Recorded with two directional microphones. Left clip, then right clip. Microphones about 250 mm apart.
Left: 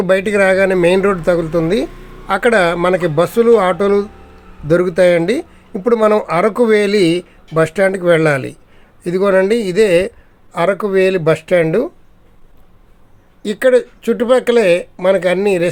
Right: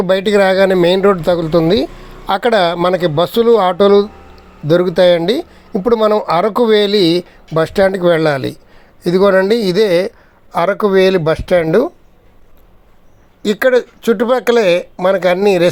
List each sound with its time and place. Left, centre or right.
0.0 s speech: centre
13.4 s speech: centre